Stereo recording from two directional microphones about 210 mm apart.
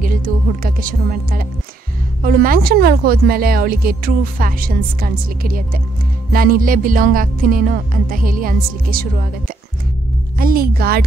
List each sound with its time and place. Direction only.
0.0 s speech: 40° right (ahead or behind)
10.3 s speech: 45° right (ahead or behind)